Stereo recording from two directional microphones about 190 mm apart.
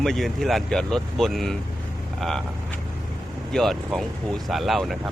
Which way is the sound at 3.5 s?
Centre (ahead or behind).